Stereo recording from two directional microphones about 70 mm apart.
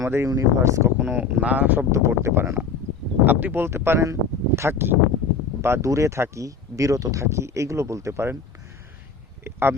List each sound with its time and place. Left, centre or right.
0.0 s speech: right
0.3 s speech: right
0.9 s speech: centre
1.9 s speech: right
5.6 s speech: right
9.4 s a sound: right